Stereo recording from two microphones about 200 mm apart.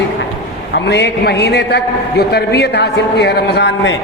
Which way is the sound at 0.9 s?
55° left (ahead or behind).